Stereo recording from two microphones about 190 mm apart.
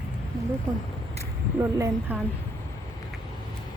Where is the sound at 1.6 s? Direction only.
15° right (ahead or behind).